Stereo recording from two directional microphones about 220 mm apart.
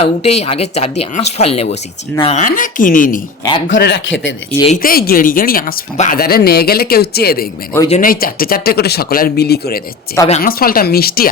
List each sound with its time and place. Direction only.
0.0 s a woman's voice: 30° left (ahead or behind)
3.8 s speech: 50° left (ahead or behind)
4.7 s speech: 40° left (ahead or behind)